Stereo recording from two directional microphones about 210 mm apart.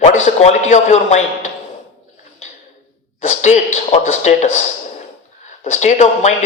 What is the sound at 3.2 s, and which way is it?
Speech, 35° left (ahead or behind).